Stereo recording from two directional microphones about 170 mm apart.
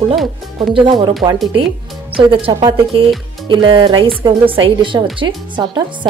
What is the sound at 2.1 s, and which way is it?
Speech, 30° right (ahead or behind).